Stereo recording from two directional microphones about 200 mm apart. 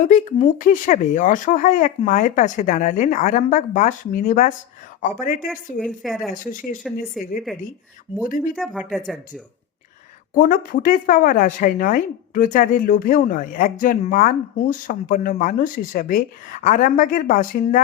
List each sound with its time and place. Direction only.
0.0 s speech: 35° left (ahead or behind)
5.8 s a woman's voice: centre (ahead or behind)
6.3 s speech: 40° left (ahead or behind)
8.1 s speech: 30° left (ahead or behind)
8.5 s a woman's voice: centre (ahead or behind)
10.3 s speech: 45° left (ahead or behind)